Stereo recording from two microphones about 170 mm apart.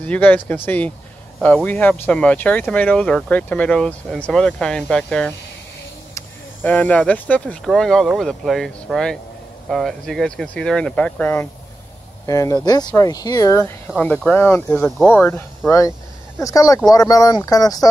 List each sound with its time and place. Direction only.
0.0 s speech: 10° left (ahead or behind)
13.8 s speech: 5° left (ahead or behind); by 17.8 s 20° left (ahead or behind)